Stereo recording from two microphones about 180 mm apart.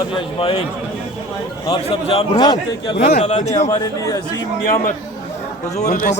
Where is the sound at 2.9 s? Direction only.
60° left (ahead or behind).